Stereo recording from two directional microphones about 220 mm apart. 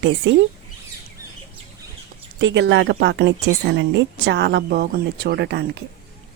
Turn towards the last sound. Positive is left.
turn(degrees=-50)  # may be behind; listen again after turning